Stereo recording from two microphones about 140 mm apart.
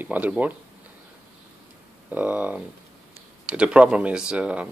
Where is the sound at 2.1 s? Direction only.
10° right (ahead or behind).